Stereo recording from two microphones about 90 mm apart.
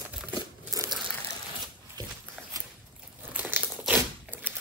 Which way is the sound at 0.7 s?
40° right (ahead or behind).